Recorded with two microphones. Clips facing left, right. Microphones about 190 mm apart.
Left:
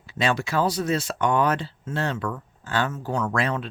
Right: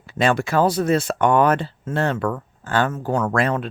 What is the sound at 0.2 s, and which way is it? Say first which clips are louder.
Speech: right 5 dB; 50° right (ahead or behind).